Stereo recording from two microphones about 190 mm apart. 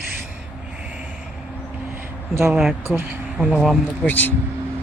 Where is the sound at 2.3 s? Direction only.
15° right (ahead or behind).